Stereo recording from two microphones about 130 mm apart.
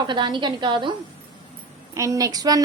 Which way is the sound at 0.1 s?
35° right (ahead or behind).